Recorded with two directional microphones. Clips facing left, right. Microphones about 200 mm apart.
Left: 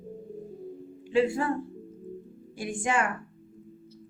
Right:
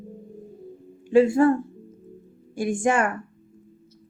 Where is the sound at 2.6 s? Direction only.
45° right (ahead or behind).